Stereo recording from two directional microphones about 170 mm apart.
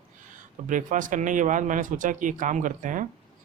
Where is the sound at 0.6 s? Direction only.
50° right (ahead or behind).